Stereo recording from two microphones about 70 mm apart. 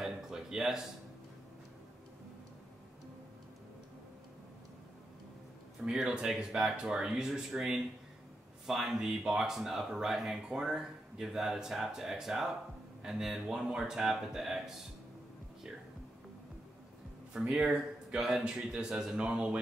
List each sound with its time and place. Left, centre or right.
0.0 s a sound: centre
5.9 s speech: centre
17.3 s speech: centre